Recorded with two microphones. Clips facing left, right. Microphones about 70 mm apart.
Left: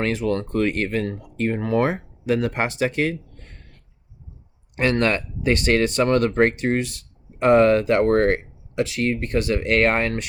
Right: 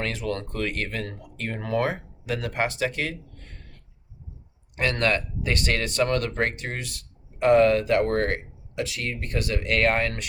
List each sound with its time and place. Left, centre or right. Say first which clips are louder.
0.0 s speech: left 6 dB; left
4.8 s speech: left 4 dB; left